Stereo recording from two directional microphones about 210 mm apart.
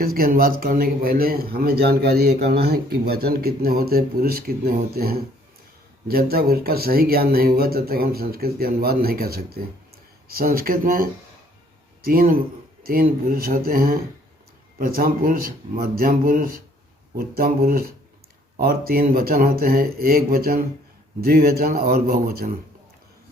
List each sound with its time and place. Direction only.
0.0 s a man's voice: 45° right (ahead or behind)